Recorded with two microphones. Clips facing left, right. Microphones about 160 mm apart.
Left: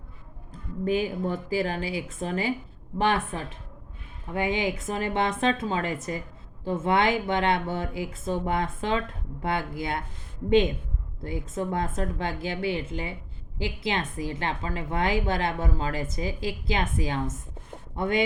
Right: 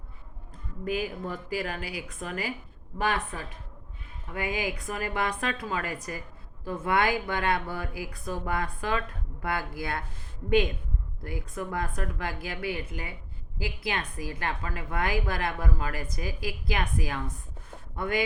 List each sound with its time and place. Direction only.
0.9 s a woman's voice: 30° left (ahead or behind)